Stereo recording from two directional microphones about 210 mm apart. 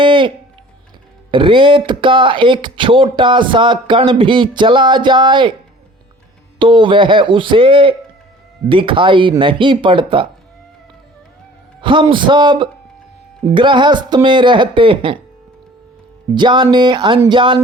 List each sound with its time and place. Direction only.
0.0 s speech: 25° right (ahead or behind)
6.6 s speech: 25° right (ahead or behind)
11.8 s speech: 25° right (ahead or behind)
16.3 s speech: 20° right (ahead or behind)